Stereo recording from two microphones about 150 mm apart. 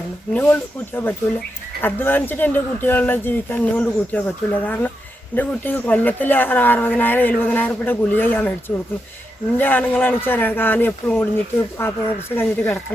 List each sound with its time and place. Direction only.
0.3 s speech: 10° left (ahead or behind)